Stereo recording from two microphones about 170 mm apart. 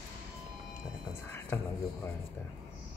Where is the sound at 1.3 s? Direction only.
15° left (ahead or behind).